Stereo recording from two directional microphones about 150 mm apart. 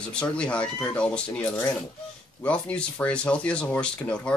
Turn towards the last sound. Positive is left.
turn(degrees=5)  # may be behind; listen again after turning